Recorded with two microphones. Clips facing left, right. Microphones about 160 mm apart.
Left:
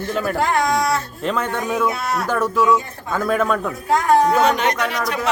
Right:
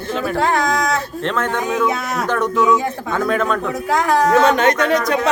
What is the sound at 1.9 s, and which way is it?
Speech, 90° right.